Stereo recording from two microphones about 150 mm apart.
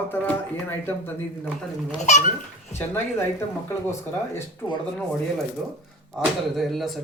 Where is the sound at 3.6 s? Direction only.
15° left (ahead or behind).